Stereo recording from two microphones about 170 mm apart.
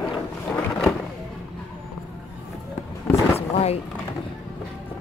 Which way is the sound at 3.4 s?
35° left (ahead or behind).